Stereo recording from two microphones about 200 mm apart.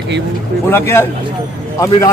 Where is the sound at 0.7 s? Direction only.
10° left (ahead or behind).